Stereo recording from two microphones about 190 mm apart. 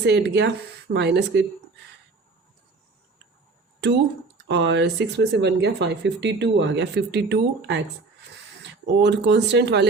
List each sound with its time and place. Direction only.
0.0 s speech: 60° right (ahead or behind)
4.4 s speech: 65° right (ahead or behind)
9.0 s speech: 65° right (ahead or behind)